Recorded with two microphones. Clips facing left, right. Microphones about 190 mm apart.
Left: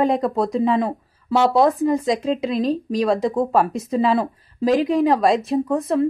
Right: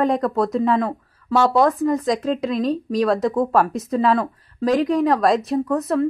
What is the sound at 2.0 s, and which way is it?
Speech, centre (ahead or behind).